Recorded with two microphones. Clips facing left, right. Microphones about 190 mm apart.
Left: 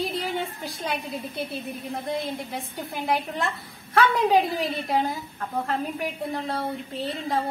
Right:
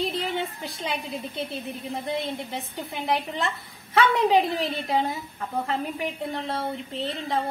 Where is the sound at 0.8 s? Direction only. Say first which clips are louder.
Left 1 dB; centre (ahead or behind).